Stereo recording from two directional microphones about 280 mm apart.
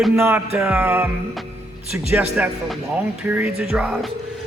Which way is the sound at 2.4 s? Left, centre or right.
Centre.